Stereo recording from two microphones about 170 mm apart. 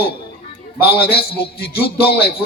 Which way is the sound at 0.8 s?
65° left (ahead or behind).